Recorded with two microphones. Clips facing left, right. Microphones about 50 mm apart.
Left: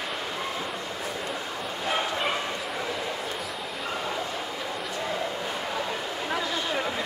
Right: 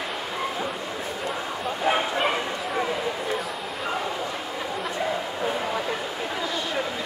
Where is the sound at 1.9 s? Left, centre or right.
Centre.